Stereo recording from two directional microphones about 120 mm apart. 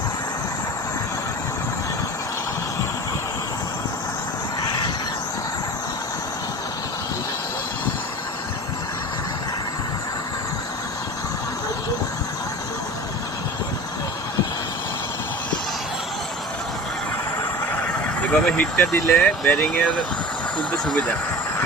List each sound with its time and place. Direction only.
18.3 s speech: 10° left (ahead or behind)